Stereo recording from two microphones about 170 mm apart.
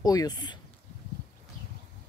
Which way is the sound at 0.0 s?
20° left (ahead or behind).